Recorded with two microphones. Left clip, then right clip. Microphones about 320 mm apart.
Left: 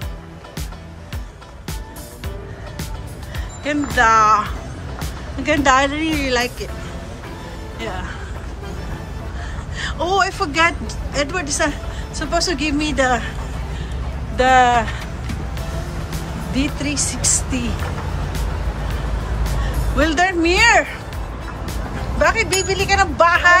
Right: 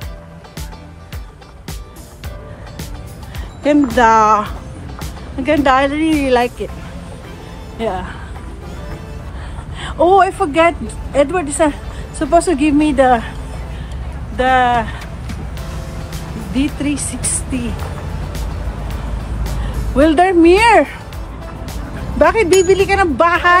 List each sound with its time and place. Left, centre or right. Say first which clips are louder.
3.6 s speech: right 5 dB; centre
4.9 s speech: right 3 dB; centre
7.8 s speech: right 7 dB; centre
9.8 s speech: right 7 dB; centre
14.3 s music: even; centre
16.1 s speech: right 3 dB; centre
20.0 s speech: right 7 dB; centre
22.2 s speech: right 6 dB; centre